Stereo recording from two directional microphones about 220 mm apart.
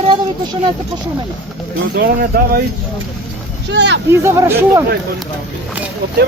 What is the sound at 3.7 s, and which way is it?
Speech, 55° right (ahead or behind).